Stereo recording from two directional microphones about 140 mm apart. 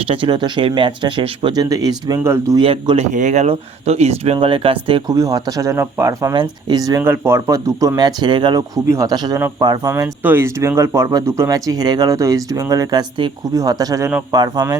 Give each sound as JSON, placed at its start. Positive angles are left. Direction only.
{"t": 0.0, "sound": "speech", "side_deg": -40}
{"t": 2.6, "sound": "a man's voice", "side_deg": -40}
{"t": 3.1, "sound": "speech", "side_deg": -60}
{"t": 5.0, "sound": "speech", "side_deg": -25}
{"t": 6.3, "sound": "speech", "side_deg": -30}
{"t": 9.9, "sound": "speech", "side_deg": -15}